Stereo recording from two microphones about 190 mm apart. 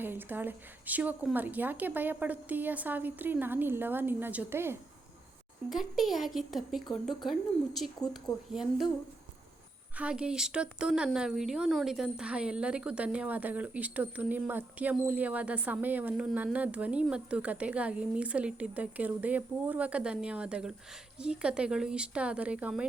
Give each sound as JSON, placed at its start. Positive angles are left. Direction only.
{"t": 0.0, "sound": "speech", "side_deg": -10}
{"t": 5.6, "sound": "speech", "side_deg": 0}
{"t": 10.0, "sound": "speech", "side_deg": -5}